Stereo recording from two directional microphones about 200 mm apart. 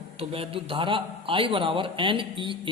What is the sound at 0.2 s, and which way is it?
A man's voice, 25° right (ahead or behind).